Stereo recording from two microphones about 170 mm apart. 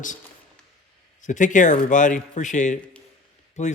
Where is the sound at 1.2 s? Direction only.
50° left (ahead or behind).